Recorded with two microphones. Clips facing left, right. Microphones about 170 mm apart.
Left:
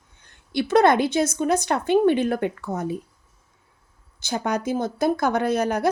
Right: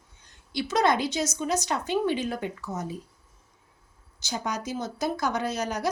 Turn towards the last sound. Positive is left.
turn(degrees=55)  # may be behind; listen again after turning